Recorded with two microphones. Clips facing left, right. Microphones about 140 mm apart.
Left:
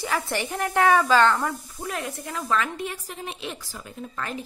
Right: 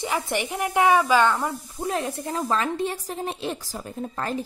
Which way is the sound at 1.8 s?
30° right (ahead or behind).